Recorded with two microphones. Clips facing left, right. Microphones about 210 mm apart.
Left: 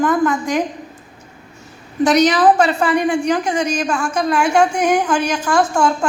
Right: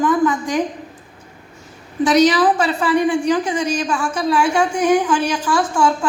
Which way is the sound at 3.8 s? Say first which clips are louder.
Left 1 dB; 45° left (ahead or behind).